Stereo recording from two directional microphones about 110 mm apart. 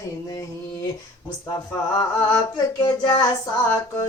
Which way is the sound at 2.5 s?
35° left (ahead or behind).